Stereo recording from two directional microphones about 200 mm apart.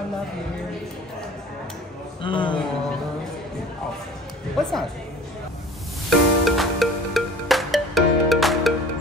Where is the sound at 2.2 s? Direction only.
25° left (ahead or behind).